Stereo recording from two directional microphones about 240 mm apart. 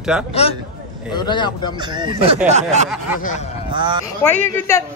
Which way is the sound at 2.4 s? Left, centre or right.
Right.